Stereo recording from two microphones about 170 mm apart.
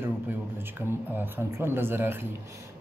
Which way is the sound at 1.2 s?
15° right (ahead or behind).